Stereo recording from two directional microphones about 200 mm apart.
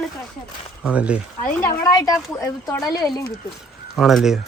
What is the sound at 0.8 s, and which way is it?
Speech, 5° right (ahead or behind).